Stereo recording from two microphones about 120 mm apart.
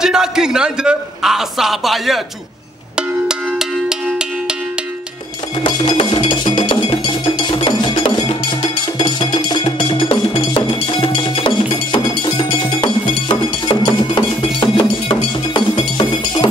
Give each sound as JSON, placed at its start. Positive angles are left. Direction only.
{"t": 0.0, "sound": "a man's voice", "side_deg": -5}
{"t": 3.0, "sound": "music", "side_deg": -5}
{"t": 5.6, "sound": "cowbell", "side_deg": 40}
{"t": 8.9, "sound": "music", "side_deg": 40}
{"t": 13.3, "sound": "cowbell", "side_deg": 40}